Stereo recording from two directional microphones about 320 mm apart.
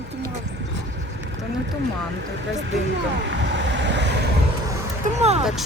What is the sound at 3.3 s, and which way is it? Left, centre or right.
Vehicle, right.